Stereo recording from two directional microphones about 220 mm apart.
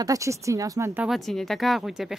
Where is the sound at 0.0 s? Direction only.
15° right (ahead or behind).